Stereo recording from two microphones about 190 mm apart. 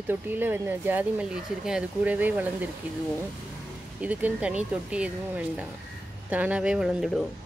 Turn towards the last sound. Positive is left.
turn(degrees=0)  # may be behind; listen again after turning